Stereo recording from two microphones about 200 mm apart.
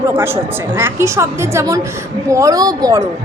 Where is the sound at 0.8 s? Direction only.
15° right (ahead or behind).